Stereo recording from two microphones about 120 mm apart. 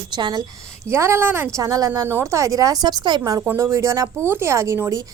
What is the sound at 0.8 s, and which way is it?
Speech, 20° right (ahead or behind).